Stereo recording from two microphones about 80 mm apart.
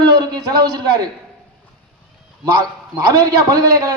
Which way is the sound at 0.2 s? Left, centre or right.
Right.